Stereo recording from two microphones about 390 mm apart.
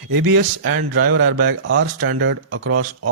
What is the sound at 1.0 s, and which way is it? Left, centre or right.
Speech, right.